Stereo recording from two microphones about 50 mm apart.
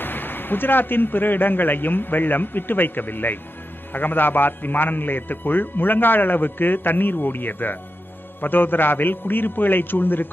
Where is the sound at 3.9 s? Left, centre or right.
Left.